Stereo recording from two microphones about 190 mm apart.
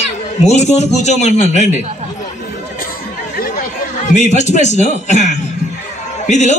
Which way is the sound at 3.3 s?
50° left (ahead or behind).